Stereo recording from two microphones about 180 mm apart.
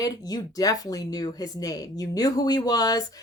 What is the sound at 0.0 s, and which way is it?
Speech, 20° left (ahead or behind).